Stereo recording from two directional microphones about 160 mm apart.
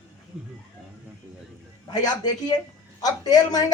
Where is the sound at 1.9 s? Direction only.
25° left (ahead or behind).